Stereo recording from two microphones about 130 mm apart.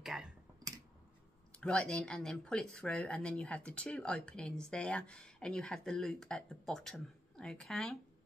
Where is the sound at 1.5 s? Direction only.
10° left (ahead or behind).